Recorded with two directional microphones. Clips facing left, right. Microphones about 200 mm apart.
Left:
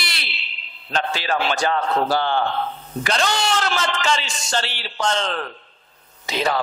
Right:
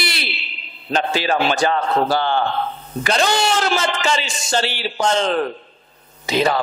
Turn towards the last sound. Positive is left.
turn(degrees=-10)  # may be behind; listen again after turning